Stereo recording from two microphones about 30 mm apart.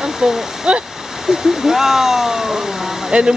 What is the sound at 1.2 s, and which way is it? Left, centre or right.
Speech, centre.